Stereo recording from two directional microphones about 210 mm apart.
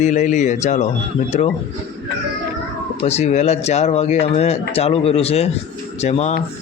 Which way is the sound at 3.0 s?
30° left (ahead or behind).